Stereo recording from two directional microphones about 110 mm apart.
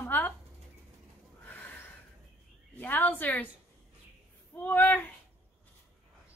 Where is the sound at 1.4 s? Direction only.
15° left (ahead or behind).